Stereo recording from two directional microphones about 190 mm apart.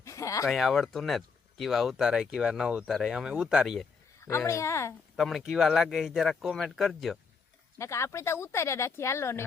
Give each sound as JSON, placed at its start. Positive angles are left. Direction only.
{"t": 0.0, "sound": "a sound", "side_deg": 15}
{"t": 0.4, "sound": "speech", "side_deg": 0}
{"t": 4.3, "sound": "speech", "side_deg": 15}
{"t": 5.1, "sound": "speech", "side_deg": 0}
{"t": 7.8, "sound": "speech", "side_deg": 15}